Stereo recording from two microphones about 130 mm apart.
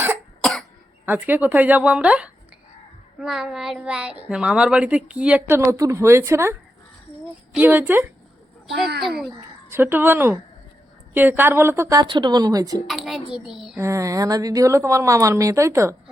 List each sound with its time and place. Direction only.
1.0 s a child's voice: 10° right (ahead or behind)
5.5 s a woman's voice: 20° right (ahead or behind)
8.6 s a child's voice: centre (ahead or behind)
9.6 s a child's voice: 15° right (ahead or behind)
12.0 s speech: 35° right (ahead or behind)
12.9 s a woman's voice: 5° right (ahead or behind)
13.7 s a woman's voice: 25° right (ahead or behind)